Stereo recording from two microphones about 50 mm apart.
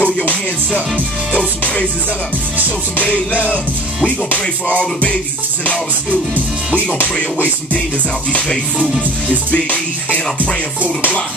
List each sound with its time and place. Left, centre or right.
0.0 s music: left
1.4 s music: left
3.3 s music: right
4.3 s music: left